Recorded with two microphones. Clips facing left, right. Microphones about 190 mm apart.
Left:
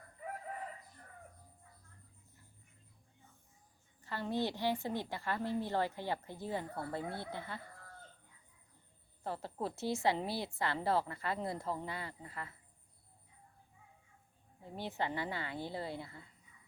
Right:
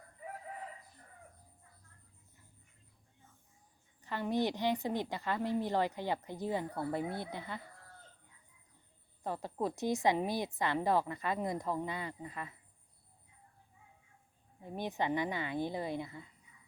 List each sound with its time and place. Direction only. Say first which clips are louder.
4.0 s a woman's voice: right 3 dB; 15° right (ahead or behind)
9.2 s a woman's voice: right 3 dB; 15° right (ahead or behind)
14.6 s a woman's voice: right 3 dB; 15° right (ahead or behind)